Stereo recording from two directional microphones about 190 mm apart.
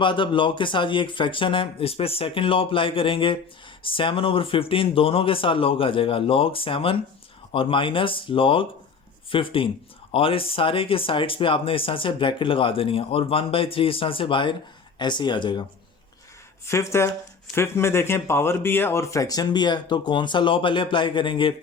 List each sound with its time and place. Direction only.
0.0 s speech: 25° left (ahead or behind)
16.6 s speech: 15° left (ahead or behind)